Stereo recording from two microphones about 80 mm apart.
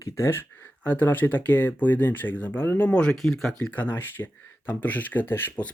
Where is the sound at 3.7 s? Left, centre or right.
Left.